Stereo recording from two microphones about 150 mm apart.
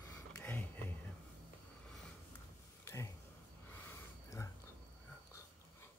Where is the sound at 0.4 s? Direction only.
10° left (ahead or behind).